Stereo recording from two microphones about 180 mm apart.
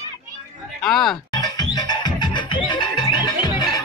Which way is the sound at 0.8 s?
Centre (ahead or behind).